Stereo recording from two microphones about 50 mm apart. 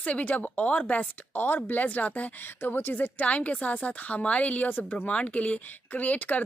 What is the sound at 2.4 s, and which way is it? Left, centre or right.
Speech, left.